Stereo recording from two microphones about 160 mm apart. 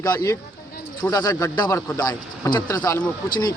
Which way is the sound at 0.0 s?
20° left (ahead or behind).